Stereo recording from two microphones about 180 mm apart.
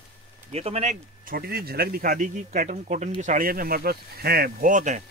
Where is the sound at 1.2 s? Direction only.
55° right (ahead or behind).